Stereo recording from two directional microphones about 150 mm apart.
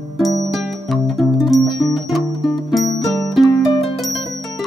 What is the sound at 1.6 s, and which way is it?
Music, 25° left (ahead or behind).